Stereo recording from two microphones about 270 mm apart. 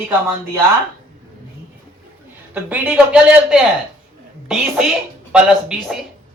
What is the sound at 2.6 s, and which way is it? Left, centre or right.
Speech, centre.